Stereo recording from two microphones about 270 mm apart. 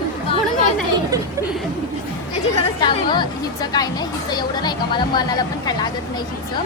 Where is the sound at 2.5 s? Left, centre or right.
Centre.